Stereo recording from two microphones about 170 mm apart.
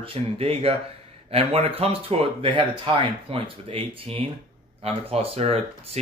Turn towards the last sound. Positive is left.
turn(degrees=-35)  # may be behind; listen again after turning